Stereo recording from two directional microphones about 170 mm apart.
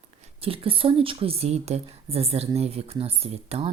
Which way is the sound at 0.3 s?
35° right (ahead or behind).